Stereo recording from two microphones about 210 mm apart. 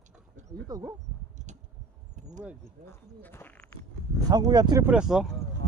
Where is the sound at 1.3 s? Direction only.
35° right (ahead or behind).